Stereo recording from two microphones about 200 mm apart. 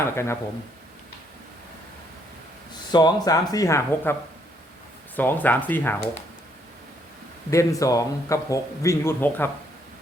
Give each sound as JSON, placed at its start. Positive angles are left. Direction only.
{"t": 0.0, "sound": "speech", "side_deg": 15}
{"t": 2.9, "sound": "speech", "side_deg": 20}
{"t": 5.1, "sound": "speech", "side_deg": 10}
{"t": 7.5, "sound": "speech", "side_deg": 15}